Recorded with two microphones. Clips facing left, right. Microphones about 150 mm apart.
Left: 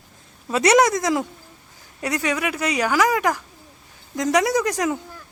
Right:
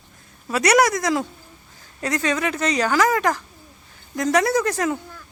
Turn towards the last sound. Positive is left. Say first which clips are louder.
# even
turn(degrees=15)  # may be behind; listen again after turning